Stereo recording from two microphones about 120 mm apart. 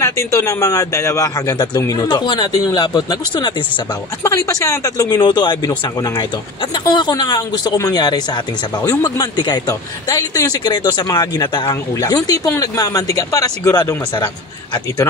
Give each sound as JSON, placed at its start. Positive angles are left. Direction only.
{"t": 0.0, "sound": "a man's voice", "side_deg": 25}
{"t": 4.2, "sound": "a man's voice", "side_deg": 25}